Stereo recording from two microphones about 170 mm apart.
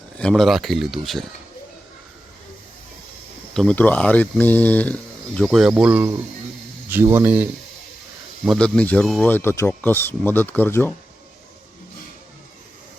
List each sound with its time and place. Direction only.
0.2 s speech: 5° left (ahead or behind)
3.5 s speech: 5° left (ahead or behind)
8.4 s speech: 5° left (ahead or behind)